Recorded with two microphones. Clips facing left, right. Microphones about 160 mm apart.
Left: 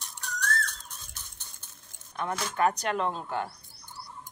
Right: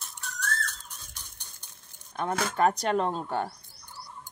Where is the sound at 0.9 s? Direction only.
15° right (ahead or behind).